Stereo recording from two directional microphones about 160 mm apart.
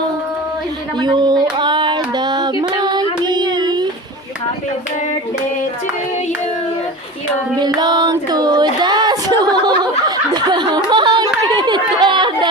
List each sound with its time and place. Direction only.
0.9 s child singing: 25° right (ahead or behind)
7.5 s child singing: 25° right (ahead or behind)
10.3 s chatter: 25° right (ahead or behind)